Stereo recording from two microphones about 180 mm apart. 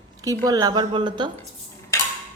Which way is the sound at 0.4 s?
20° right (ahead or behind).